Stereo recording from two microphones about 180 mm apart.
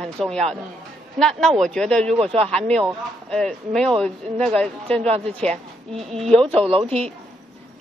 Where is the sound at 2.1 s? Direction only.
35° right (ahead or behind).